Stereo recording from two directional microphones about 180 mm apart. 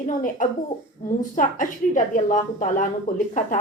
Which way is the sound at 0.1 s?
45° left (ahead or behind).